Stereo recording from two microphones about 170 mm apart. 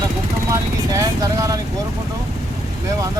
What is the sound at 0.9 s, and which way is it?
Vehicle, 20° right (ahead or behind).